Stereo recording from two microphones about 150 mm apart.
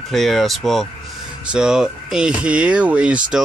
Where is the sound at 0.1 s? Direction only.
Centre (ahead or behind).